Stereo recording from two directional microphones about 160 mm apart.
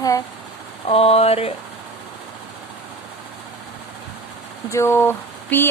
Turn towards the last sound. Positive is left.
turn(degrees=15)  # may be behind; listen again after turning